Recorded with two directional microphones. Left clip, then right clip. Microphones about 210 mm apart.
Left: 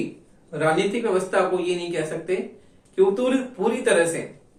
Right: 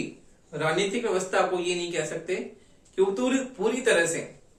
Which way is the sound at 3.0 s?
15° right (ahead or behind).